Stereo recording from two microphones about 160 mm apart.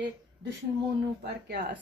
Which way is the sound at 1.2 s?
80° right.